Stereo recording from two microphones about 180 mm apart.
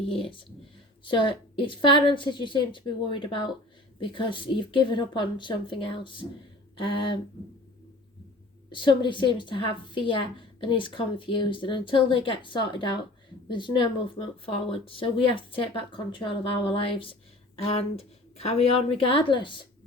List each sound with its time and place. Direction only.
0.1 s a woman's voice: 30° left (ahead or behind)
8.7 s a woman's voice: 25° left (ahead or behind)